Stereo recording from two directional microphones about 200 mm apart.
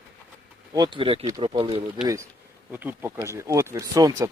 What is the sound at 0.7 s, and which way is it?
Speech, 20° right (ahead or behind).